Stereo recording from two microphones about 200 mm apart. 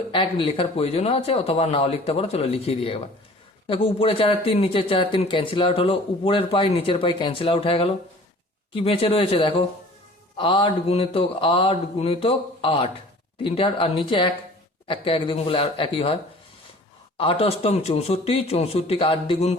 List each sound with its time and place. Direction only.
0.1 s speech: 25° left (ahead or behind)
17.2 s speech: 30° left (ahead or behind)